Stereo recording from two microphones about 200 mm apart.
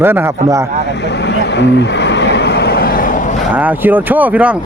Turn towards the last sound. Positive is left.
turn(degrees=-5)  # may be behind; listen again after turning